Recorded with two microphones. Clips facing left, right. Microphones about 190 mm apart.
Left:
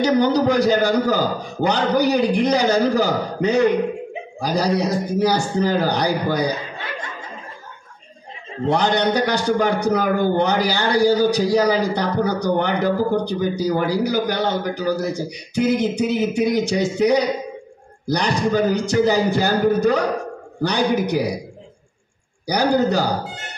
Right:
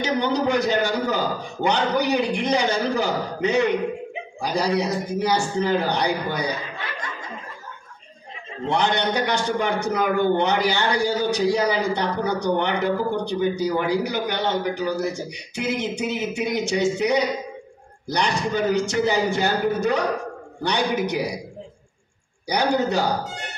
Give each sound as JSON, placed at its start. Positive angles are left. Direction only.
{"t": 0.0, "sound": "a man's voice", "side_deg": 35}
{"t": 8.6, "sound": "a man's voice", "side_deg": 35}
{"t": 22.5, "sound": "a man's voice", "side_deg": 35}